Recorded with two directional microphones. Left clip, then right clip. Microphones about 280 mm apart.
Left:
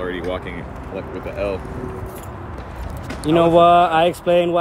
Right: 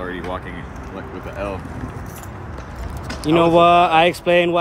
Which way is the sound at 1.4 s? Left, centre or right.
Centre.